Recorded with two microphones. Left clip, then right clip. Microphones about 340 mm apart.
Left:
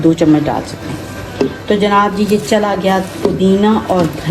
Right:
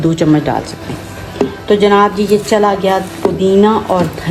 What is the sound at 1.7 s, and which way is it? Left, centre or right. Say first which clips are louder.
A woman's voice: right 3 dB; right.